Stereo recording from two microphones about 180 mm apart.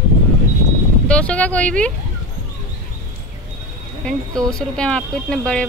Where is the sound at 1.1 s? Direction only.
5° left (ahead or behind).